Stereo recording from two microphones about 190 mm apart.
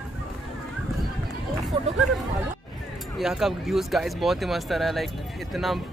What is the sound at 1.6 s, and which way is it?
Speech, centre (ahead or behind).